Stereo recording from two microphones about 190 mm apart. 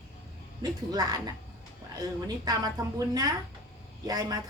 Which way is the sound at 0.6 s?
20° right (ahead or behind).